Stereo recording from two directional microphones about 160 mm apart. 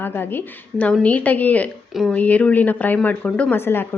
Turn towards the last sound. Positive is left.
turn(degrees=15)  # may be behind; listen again after turning